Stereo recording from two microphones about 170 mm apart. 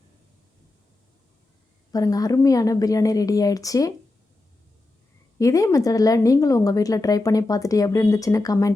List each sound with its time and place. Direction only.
1.9 s speech: 20° left (ahead or behind)
5.4 s speech: 20° left (ahead or behind)